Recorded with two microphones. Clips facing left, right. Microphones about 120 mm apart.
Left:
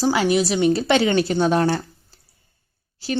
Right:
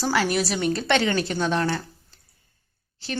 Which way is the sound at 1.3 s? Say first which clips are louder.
Left 5 dB; 40° left (ahead or behind).